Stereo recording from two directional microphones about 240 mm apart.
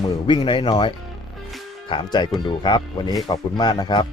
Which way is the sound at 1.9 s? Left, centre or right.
Centre.